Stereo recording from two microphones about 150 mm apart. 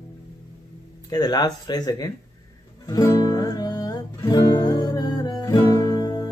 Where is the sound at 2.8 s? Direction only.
25° left (ahead or behind).